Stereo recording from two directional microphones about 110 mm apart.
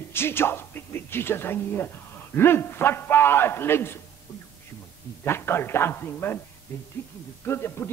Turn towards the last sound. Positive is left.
turn(degrees=20)  # may be behind; listen again after turning